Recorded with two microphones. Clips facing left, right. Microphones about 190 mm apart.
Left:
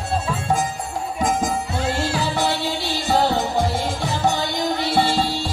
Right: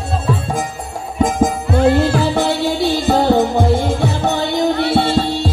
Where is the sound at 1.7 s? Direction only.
55° right (ahead or behind).